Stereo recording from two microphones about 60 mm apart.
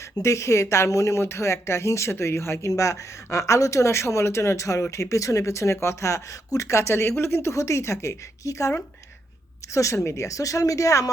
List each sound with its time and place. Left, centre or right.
0.2 s speech: left
9.7 s speech: left